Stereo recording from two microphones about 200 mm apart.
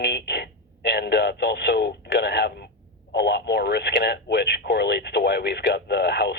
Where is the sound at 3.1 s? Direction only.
55° left (ahead or behind).